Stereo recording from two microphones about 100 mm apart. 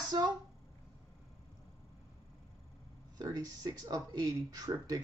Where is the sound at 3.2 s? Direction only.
40° right (ahead or behind).